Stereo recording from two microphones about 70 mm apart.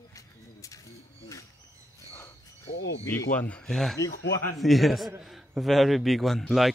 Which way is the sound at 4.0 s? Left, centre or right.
Left.